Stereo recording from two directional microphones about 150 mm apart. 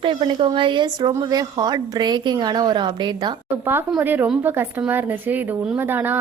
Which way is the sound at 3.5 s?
15° right (ahead or behind).